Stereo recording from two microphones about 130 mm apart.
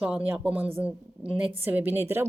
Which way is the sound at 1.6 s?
15° right (ahead or behind).